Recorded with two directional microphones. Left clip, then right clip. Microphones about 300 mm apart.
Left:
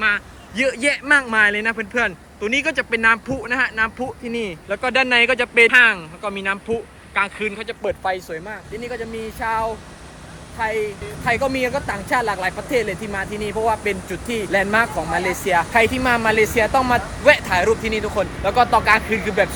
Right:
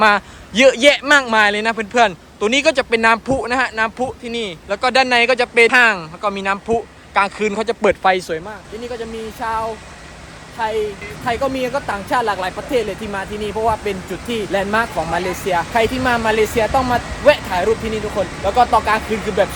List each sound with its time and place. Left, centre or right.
0.5 s speech: centre
7.8 s speech: right
9.4 s speech: centre